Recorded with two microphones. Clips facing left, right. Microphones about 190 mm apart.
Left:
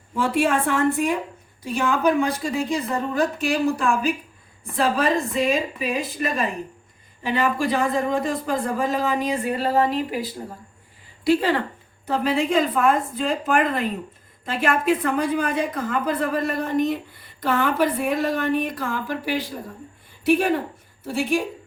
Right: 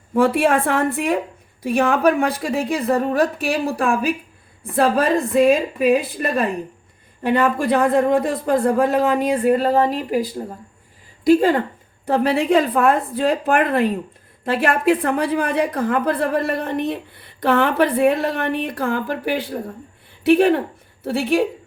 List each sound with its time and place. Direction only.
0.1 s a woman's voice: 55° right (ahead or behind)
12.0 s a woman's voice: 65° right (ahead or behind)